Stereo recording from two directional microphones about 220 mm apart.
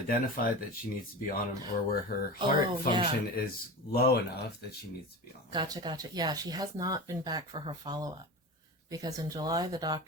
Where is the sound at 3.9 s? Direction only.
45° left (ahead or behind).